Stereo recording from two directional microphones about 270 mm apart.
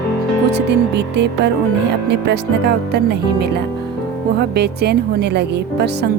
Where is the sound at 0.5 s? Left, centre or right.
Right.